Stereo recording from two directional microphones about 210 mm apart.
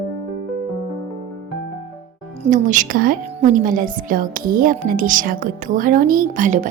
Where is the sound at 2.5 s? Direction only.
40° right (ahead or behind).